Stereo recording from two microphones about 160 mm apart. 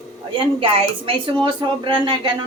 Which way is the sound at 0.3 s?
35° right (ahead or behind).